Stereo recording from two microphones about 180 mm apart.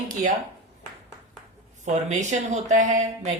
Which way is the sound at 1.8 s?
40° right (ahead or behind).